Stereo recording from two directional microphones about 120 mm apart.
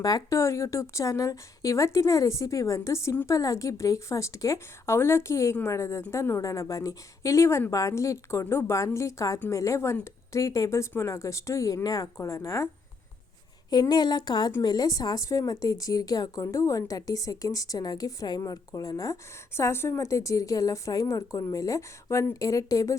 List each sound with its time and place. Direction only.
0.0 s speech: 30° left (ahead or behind)
13.7 s a woman's voice: 35° left (ahead or behind)